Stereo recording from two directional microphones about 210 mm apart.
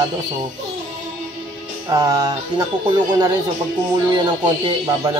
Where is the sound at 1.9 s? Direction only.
15° right (ahead or behind).